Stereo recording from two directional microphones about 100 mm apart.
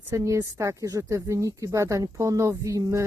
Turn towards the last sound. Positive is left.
turn(degrees=-35)  # may be behind; listen again after turning